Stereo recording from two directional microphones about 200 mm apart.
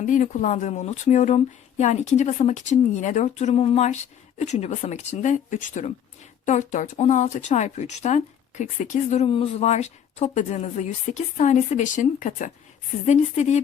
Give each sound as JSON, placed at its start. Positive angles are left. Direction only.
{"t": 0.0, "sound": "speech", "side_deg": 40}